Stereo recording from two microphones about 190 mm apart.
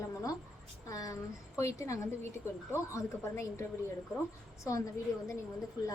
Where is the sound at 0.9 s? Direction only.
15° left (ahead or behind).